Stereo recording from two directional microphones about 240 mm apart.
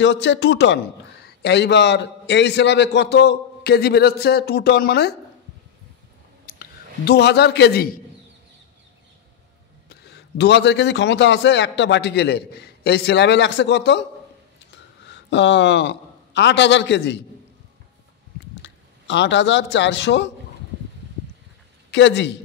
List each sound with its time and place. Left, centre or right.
0.0 s a man's voice: left
6.4 s a man's voice: left
9.8 s a man's voice: left
15.0 s a man's voice: left
18.6 s speech: left
21.9 s a man's voice: left